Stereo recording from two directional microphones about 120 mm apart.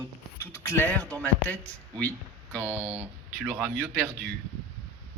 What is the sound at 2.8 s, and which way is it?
Speech, 20° right (ahead or behind).